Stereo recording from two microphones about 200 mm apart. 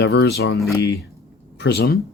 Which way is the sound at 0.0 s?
60° left (ahead or behind).